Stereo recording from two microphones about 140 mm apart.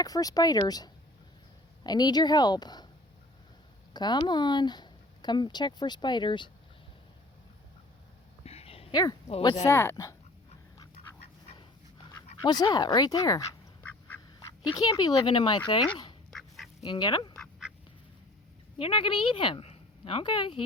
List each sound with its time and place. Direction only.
0.0 s a woman's voice: 25° left (ahead or behind)
3.9 s speech: 30° left (ahead or behind)
8.4 s a sound: 45° left (ahead or behind)
8.9 s a woman's voice: 30° left (ahead or behind)
12.4 s a woman's voice: 30° left (ahead or behind)
14.3 s speech: 30° left (ahead or behind)
16.3 s duck: 5° left (ahead or behind)
16.8 s speech: 35° left (ahead or behind)
17.7 s duck: 5° right (ahead or behind)
18.8 s speech: 35° left (ahead or behind)